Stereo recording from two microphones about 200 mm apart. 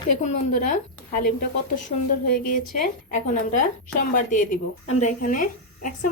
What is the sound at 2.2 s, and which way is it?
A woman's voice, 45° left (ahead or behind).